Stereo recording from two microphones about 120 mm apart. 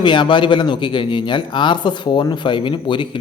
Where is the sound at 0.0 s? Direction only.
40° left (ahead or behind).